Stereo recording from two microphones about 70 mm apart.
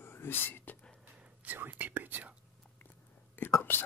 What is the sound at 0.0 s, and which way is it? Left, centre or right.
Whispering, left.